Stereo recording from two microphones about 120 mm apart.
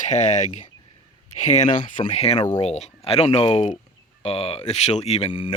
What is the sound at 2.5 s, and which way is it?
Speech, 70° left (ahead or behind).